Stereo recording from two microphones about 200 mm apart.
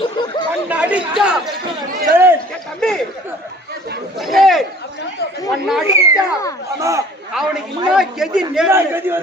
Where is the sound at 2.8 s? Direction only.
5° left (ahead or behind).